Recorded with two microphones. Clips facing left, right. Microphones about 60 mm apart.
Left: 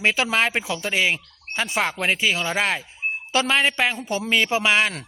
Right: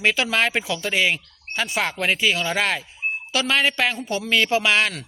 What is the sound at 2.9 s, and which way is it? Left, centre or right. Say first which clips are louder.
Speech: left 2 dB; left.